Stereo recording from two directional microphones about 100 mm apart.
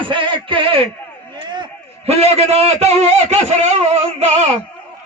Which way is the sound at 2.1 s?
90° right.